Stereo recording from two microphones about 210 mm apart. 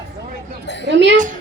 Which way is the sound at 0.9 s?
55° right (ahead or behind).